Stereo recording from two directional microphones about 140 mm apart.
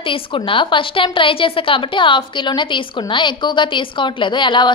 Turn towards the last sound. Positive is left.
turn(degrees=35)  # may be behind; listen again after turning